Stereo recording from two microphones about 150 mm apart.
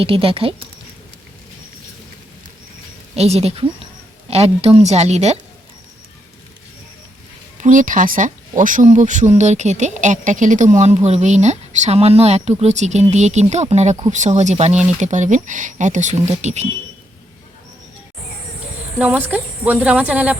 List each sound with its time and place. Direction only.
0.0 s speech: 35° right (ahead or behind)
3.2 s speech: 45° right (ahead or behind)
7.6 s speech: 60° right (ahead or behind)
18.9 s speech: 10° right (ahead or behind)